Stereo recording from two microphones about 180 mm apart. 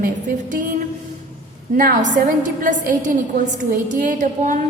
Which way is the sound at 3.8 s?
45° right (ahead or behind).